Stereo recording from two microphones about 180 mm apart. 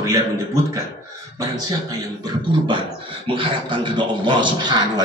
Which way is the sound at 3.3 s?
25° right (ahead or behind).